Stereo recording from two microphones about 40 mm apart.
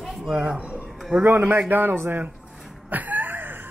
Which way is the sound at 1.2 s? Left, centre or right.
Right.